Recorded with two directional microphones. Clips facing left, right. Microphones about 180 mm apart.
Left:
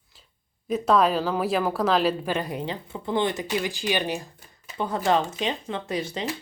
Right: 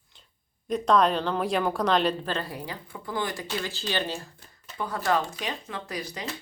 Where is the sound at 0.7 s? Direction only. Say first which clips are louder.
Left 1 dB; 5° left (ahead or behind).